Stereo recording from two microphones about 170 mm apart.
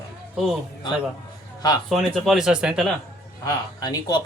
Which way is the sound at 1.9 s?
Centre (ahead or behind).